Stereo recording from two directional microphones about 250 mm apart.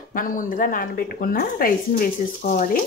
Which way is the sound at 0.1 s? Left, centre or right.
Left.